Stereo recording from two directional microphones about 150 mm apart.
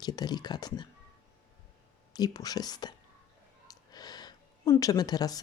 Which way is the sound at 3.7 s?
25° left (ahead or behind).